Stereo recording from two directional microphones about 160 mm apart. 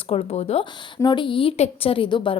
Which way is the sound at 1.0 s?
30° left (ahead or behind).